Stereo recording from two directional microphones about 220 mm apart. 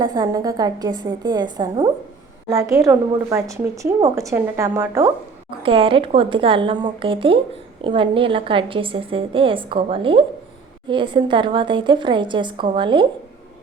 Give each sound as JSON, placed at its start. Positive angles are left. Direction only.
{"t": 0.0, "sound": "a woman's voice", "side_deg": -20}
{"t": 5.6, "sound": "a woman's voice", "side_deg": -25}